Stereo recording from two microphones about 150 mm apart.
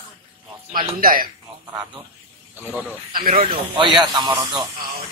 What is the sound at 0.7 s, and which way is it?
Speech, 70° right (ahead or behind).